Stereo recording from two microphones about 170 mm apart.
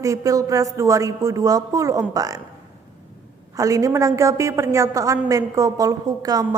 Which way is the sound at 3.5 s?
20° right (ahead or behind).